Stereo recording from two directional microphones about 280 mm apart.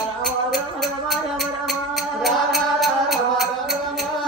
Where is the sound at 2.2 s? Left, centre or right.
Centre.